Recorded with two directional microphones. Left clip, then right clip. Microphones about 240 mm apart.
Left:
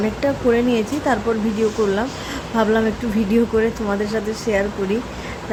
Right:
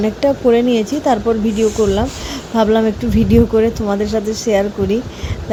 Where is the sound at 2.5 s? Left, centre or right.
Right.